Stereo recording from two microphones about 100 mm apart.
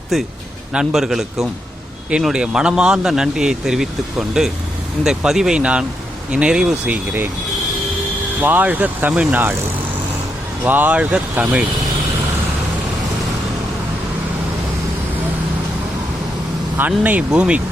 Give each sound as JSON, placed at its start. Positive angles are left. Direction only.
{"t": 0.1, "sound": "a man's voice", "side_deg": 0}
{"t": 8.4, "sound": "speech", "side_deg": -15}
{"t": 10.6, "sound": "speech", "side_deg": -20}
{"t": 16.7, "sound": "speech", "side_deg": -15}